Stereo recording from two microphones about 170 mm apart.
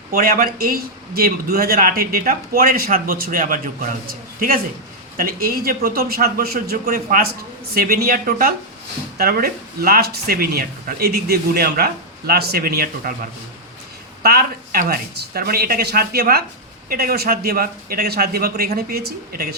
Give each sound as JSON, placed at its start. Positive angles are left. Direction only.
{"t": 0.1, "sound": "speech", "side_deg": -60}
{"t": 14.2, "sound": "speech", "side_deg": -65}